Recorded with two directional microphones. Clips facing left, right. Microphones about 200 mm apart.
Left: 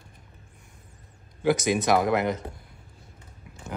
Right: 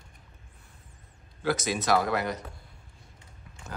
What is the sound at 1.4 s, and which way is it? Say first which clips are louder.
Speech: left 5 dB; 15° left (ahead or behind).